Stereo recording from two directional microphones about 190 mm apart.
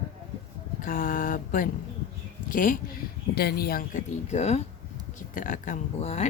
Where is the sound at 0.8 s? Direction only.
45° left (ahead or behind).